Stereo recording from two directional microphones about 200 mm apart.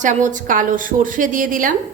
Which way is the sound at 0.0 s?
40° right (ahead or behind).